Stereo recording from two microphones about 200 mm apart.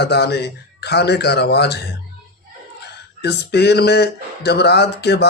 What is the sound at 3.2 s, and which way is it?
Speech, 55° left (ahead or behind).